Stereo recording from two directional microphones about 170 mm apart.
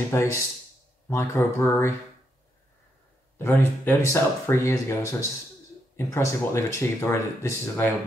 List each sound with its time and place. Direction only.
0.1 s speech: 15° left (ahead or behind)
3.3 s speech: 10° left (ahead or behind)